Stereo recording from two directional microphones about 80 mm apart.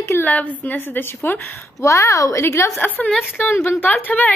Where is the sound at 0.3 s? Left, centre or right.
Centre.